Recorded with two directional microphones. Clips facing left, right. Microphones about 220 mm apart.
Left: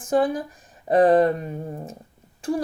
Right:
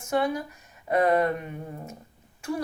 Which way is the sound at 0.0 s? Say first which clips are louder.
Left 5 dB; 35° left (ahead or behind).